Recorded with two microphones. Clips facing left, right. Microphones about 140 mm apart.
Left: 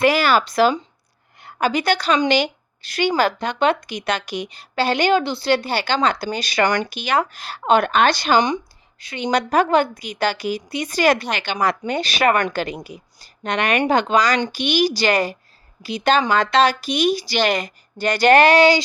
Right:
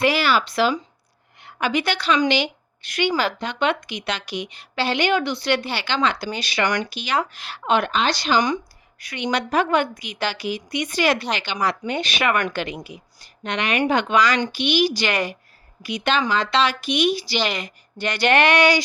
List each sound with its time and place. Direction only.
0.0 s a woman's voice: 45° left (ahead or behind)
6.9 s speech: 50° left (ahead or behind)
9.0 s a woman's voice: 30° left (ahead or behind)
16.3 s a woman's voice: 50° left (ahead or behind); by 18.8 s 30° left (ahead or behind)